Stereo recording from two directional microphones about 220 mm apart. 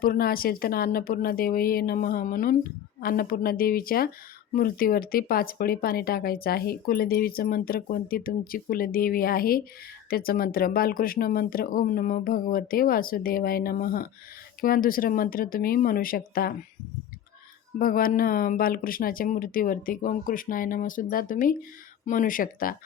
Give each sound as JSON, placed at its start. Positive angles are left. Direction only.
{"t": 0.0, "sound": "a woman's voice", "side_deg": 40}
{"t": 17.7, "sound": "a woman's voice", "side_deg": 40}